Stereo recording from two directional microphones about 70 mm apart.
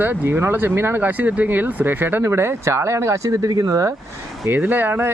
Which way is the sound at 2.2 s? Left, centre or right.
Right.